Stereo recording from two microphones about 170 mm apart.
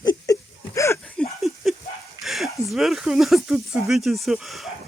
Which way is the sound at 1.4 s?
Centre (ahead or behind).